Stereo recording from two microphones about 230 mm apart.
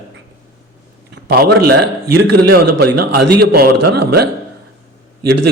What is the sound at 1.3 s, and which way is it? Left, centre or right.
A man's voice, right.